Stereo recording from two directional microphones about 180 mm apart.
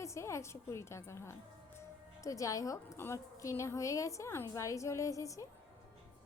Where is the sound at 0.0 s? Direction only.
15° left (ahead or behind).